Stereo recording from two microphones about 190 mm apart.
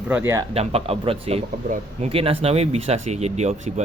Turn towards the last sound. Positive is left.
turn(degrees=-35)  # may be behind; listen again after turning